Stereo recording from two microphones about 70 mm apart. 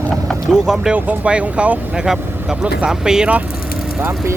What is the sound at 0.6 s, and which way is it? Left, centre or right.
Speech, centre.